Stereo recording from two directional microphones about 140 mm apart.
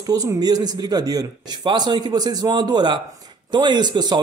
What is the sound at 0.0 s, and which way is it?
A man's voice, 25° right (ahead or behind).